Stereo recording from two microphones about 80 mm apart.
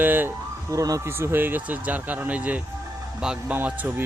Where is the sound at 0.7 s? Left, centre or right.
Right.